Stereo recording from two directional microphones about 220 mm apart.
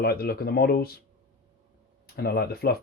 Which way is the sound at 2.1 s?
45° left (ahead or behind).